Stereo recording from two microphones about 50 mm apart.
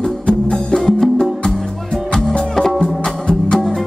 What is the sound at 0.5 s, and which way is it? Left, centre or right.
Music, centre.